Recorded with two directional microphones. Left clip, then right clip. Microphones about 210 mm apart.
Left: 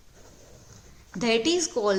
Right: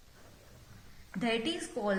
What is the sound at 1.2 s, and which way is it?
Speech, 55° left (ahead or behind).